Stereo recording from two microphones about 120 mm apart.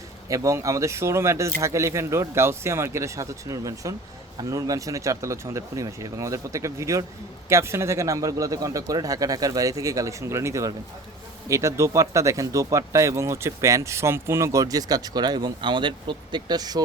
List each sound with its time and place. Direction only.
0.3 s speech: 25° right (ahead or behind)